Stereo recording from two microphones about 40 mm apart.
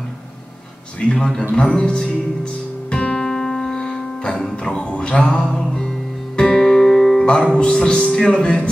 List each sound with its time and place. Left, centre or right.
1.1 s a man's voice: centre
1.5 s music: left